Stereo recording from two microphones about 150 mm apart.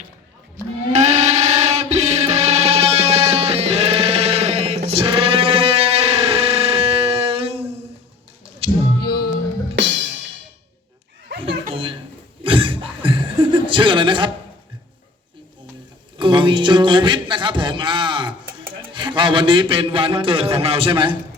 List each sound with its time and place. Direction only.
0.5 s music: 50° right (ahead or behind)
8.6 s a capella: 40° right (ahead or behind)
9.0 s music: 90° left
11.7 s a sound: 35° right (ahead or behind)
12.4 s chuckle: 35° right (ahead or behind)
16.1 s speech: 30° right (ahead or behind)